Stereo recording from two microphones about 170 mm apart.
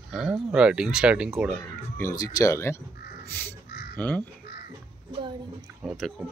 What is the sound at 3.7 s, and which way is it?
Crow, 70° left (ahead or behind).